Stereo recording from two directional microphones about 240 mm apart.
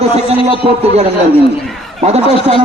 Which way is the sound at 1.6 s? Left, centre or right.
Centre.